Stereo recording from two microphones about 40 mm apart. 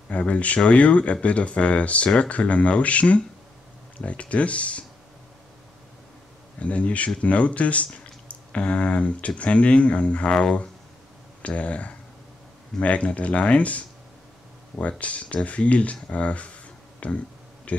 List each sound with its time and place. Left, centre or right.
0.1 s speech: left
6.6 s speech: left
11.4 s speech: left